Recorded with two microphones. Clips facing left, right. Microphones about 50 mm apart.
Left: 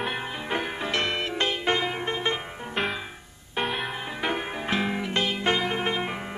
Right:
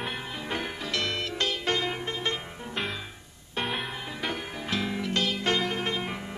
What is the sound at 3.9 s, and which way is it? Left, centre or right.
Music, left.